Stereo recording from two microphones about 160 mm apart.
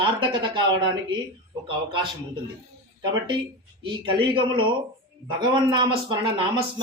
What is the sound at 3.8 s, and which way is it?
A man's voice, 30° right (ahead or behind).